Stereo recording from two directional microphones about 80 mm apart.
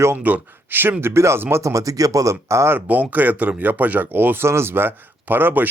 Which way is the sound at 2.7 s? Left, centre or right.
Centre.